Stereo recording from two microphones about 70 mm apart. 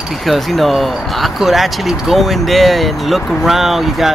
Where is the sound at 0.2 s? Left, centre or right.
Centre.